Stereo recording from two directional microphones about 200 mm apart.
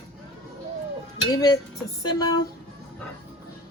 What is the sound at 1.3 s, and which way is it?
Speech, 20° left (ahead or behind).